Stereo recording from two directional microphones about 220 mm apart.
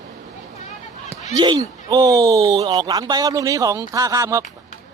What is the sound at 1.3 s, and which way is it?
Speech, 20° right (ahead or behind).